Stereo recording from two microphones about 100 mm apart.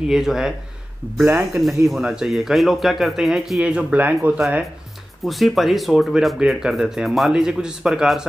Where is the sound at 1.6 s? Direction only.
Centre (ahead or behind).